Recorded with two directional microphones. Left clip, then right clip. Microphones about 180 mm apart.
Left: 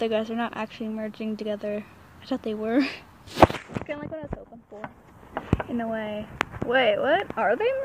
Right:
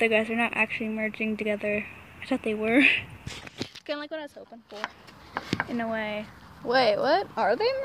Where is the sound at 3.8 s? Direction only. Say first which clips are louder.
Right 5 dB; 25° right (ahead or behind).